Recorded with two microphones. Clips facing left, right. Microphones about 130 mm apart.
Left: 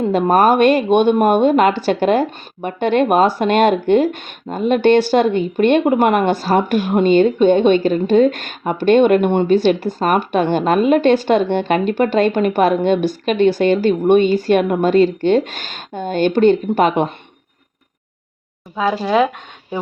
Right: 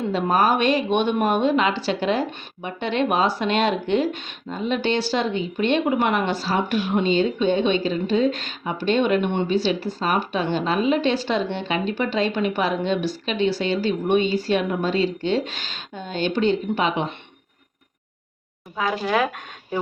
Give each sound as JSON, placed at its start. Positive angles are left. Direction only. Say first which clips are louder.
{"t": 0.0, "sound": "speech", "louder": "left 7 dB", "side_deg": 50}
{"t": 18.8, "sound": "speech", "louder": "left 6 dB", "side_deg": 25}